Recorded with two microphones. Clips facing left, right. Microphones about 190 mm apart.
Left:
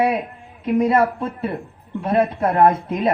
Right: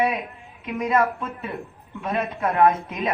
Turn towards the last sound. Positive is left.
turn(degrees=30)  # may be behind; listen again after turning